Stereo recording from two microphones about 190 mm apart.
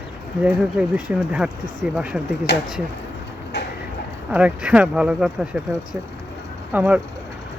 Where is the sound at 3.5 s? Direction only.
65° left (ahead or behind).